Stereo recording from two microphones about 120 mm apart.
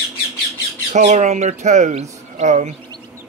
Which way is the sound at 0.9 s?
80° right.